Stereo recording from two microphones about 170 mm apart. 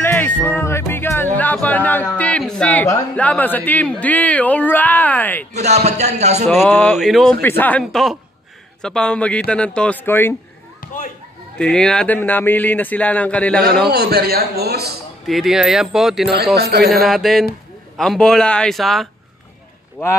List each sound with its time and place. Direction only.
0.0 s music: 10° left (ahead or behind)
2.1 s a sound: 10° left (ahead or behind)
3.2 s speech: 10° left (ahead or behind)
5.5 s speech: 40° right (ahead or behind)
6.7 s a man's voice: 5° left (ahead or behind)
7.4 s speech: 10° left (ahead or behind)
7.8 s a man's voice: centre (ahead or behind)
11.5 s speech: 5° left (ahead or behind)
13.8 s a man's voice: 65° right (ahead or behind)
15.2 s a man's voice: centre (ahead or behind)
16.5 s a man's voice: 70° right (ahead or behind)
16.9 s a man's voice: centre (ahead or behind)